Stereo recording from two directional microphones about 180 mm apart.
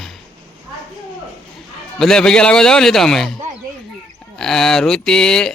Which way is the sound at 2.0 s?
5° left (ahead or behind).